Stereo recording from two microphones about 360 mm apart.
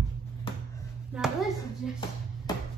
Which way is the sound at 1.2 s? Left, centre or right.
Centre.